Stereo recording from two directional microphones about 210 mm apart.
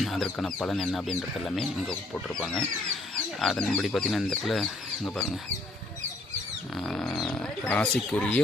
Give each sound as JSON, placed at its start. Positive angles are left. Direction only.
{"t": 0.0, "sound": "speech", "side_deg": 0}
{"t": 6.7, "sound": "speech", "side_deg": 0}